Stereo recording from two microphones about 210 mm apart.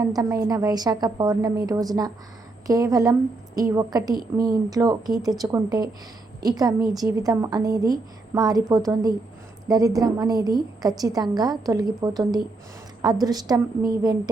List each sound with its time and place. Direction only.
0.0 s a woman's voice: 15° right (ahead or behind)